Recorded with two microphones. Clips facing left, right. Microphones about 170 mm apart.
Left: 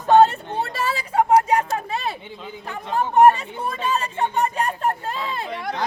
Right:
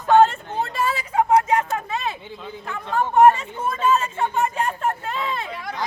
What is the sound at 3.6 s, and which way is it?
Speech, 35° left (ahead or behind).